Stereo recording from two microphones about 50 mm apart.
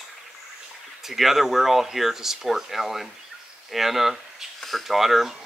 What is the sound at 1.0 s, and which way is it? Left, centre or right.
Speech, centre.